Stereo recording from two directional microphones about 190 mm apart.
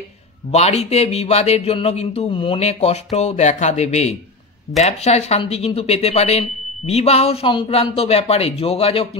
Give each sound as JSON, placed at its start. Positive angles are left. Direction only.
{"t": 0.5, "sound": "speech", "side_deg": 35}